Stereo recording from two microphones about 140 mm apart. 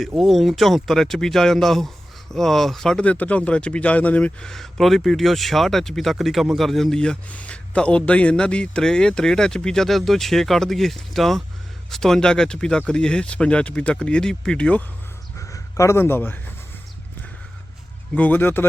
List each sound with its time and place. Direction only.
0.1 s speech: centre (ahead or behind)
15.4 s a man's voice: 20° left (ahead or behind)
18.1 s speech: 10° left (ahead or behind)